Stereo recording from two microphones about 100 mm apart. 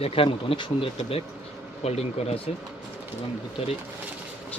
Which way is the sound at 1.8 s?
90° left.